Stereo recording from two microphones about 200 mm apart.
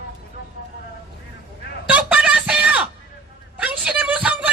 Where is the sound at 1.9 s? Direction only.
5° right (ahead or behind).